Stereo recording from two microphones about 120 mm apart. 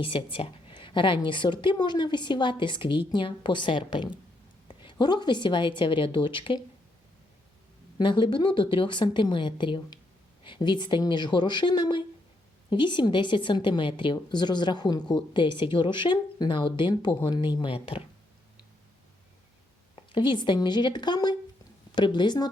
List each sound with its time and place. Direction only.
0.0 s a woman's voice: 50° left (ahead or behind)
7.9 s a woman's voice: 40° left (ahead or behind)
20.1 s a woman's voice: 40° left (ahead or behind)